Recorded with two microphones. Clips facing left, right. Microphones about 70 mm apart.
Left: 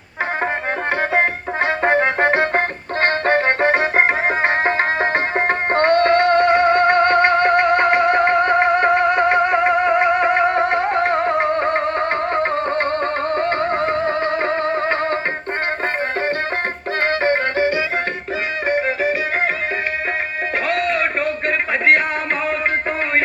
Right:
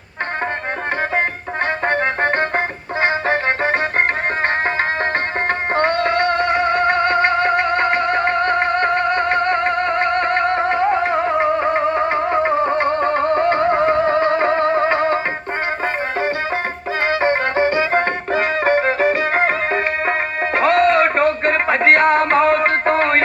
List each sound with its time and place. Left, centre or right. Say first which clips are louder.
1.8 s music: left 3 dB; centre
5.7 s music: left 4 dB; centre
17.1 s music: right 1 dB; centre
17.9 s music: right 5 dB; right
20.6 s music: right 7 dB; right